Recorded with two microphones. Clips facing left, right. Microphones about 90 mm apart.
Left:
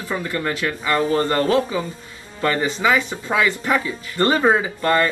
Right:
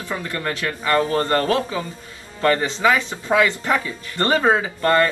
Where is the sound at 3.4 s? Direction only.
20° left (ahead or behind).